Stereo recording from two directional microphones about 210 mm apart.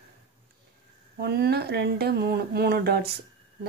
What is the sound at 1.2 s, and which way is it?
Speech, 50° right (ahead or behind).